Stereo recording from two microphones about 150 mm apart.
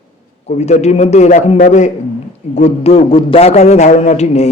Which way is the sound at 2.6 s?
45° left (ahead or behind).